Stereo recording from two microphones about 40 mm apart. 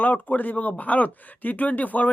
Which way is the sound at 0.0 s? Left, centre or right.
Left.